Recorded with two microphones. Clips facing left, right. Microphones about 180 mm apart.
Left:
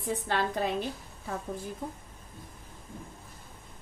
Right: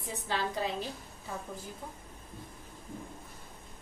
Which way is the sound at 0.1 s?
55° left (ahead or behind).